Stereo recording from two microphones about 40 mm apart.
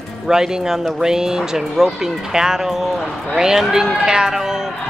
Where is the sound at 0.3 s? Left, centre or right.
Centre.